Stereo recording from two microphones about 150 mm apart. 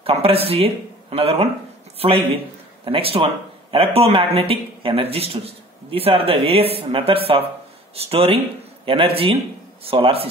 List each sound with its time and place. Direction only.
0.0 s a man's voice: 40° right (ahead or behind)